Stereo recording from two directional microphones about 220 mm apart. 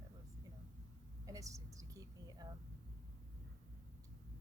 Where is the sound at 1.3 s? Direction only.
15° right (ahead or behind).